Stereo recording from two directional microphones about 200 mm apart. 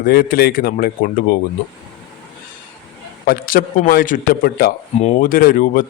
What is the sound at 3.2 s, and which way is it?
Speech, 45° left (ahead or behind).